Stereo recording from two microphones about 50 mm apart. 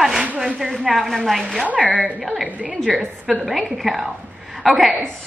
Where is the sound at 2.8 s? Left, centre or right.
Centre.